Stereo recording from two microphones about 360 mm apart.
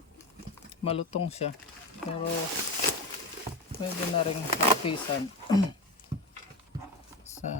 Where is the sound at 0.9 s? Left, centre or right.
Centre.